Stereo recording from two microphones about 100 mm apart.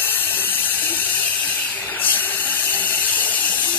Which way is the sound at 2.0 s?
20° left (ahead or behind).